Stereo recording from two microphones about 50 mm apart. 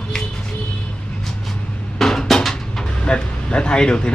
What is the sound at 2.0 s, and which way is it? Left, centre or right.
Dishes, centre.